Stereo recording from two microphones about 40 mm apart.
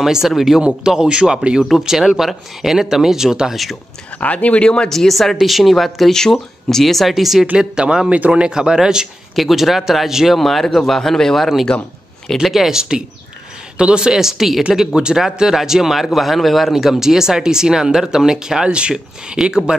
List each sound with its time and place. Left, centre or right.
0.0 s speech: centre
0.6 s a man's voice: right
4.2 s speech: left
4.6 s speech: left
4.9 s a man's voice: centre
7.5 s a man's voice: centre
9.3 s a man's voice: centre
10.4 s a man's voice: centre
12.7 s a man's voice: centre
17.0 s speech: centre